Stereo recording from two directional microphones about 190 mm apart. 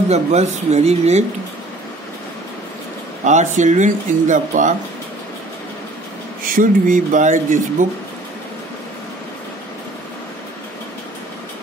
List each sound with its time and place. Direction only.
0.1 s speech: 35° right (ahead or behind)
3.3 s speech: 40° right (ahead or behind)
6.4 s speech: 45° right (ahead or behind)